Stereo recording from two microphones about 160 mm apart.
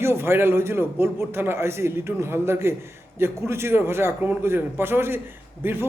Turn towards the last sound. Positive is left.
turn(degrees=-15)  # may be behind; listen again after turning